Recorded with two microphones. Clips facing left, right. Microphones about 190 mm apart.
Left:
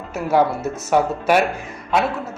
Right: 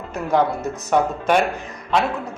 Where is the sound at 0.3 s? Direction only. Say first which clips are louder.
Left 2 dB; 5° left (ahead or behind).